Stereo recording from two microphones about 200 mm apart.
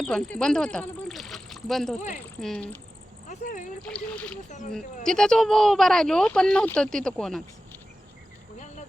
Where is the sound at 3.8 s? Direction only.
5° left (ahead or behind).